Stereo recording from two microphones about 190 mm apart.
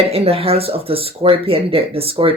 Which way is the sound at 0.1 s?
30° right (ahead or behind).